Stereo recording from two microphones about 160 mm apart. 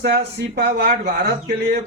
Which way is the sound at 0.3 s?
90° right.